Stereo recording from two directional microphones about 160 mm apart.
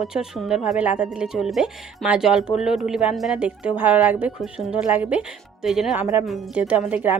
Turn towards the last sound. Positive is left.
turn(degrees=-10)  # may be behind; listen again after turning